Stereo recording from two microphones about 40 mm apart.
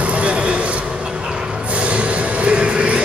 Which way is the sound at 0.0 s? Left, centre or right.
Right.